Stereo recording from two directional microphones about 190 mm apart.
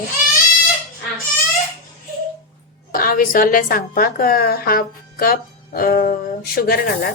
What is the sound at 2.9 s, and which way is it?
A woman's voice, 50° left (ahead or behind).